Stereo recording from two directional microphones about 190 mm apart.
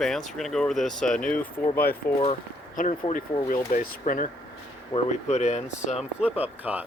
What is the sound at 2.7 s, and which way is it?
Speech, 45° left (ahead or behind).